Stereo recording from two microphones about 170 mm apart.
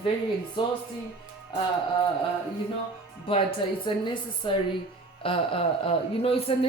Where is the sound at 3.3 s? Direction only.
30° left (ahead or behind).